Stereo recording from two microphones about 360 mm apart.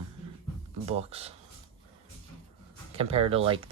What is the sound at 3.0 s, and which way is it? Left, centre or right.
Speech, centre.